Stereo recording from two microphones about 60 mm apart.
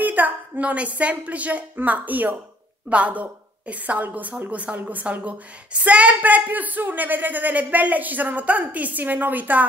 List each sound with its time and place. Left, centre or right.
0.0 s a woman's voice: right